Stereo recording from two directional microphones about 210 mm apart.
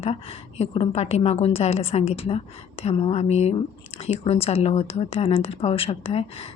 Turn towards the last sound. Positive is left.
turn(degrees=25)  # may be behind; listen again after turning